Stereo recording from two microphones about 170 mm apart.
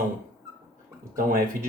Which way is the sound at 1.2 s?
55° right (ahead or behind).